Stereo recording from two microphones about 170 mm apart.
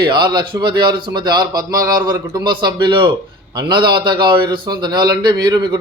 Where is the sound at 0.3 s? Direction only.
25° right (ahead or behind).